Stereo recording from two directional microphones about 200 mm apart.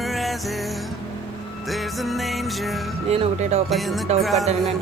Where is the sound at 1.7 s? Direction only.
Centre (ahead or behind).